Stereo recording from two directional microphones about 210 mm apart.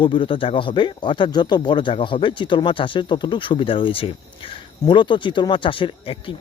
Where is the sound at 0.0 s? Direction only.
25° left (ahead or behind).